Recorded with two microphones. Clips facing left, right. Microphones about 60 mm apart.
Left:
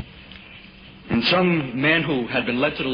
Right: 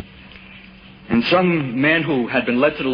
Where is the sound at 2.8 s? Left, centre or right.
Centre.